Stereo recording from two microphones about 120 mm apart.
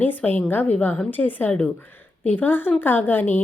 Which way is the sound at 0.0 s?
15° left (ahead or behind).